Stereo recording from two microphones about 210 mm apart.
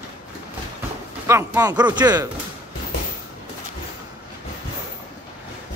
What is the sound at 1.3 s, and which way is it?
Speech, 15° right (ahead or behind).